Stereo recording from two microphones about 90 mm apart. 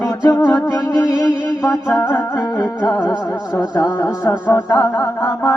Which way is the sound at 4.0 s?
45° left (ahead or behind).